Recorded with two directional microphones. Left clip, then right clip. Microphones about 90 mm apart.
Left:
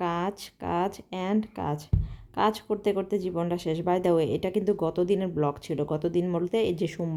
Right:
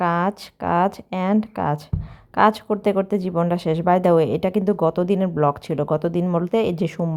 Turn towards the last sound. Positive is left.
turn(degrees=-45)  # may be behind; listen again after turning